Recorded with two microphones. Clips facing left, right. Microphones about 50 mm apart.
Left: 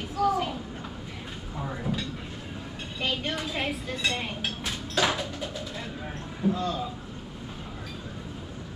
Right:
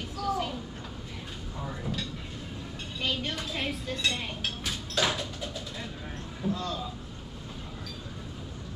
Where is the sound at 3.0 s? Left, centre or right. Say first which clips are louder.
Left 2 dB; centre.